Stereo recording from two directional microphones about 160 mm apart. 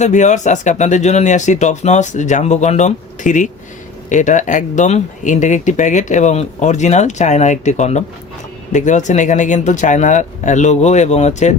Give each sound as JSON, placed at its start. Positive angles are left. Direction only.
{"t": 0.0, "sound": "speech", "side_deg": 50}